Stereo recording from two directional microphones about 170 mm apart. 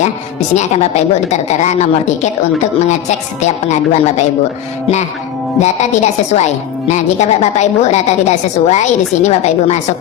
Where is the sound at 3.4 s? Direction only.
40° left (ahead or behind).